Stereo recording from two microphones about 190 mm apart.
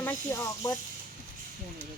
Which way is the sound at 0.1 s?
15° left (ahead or behind).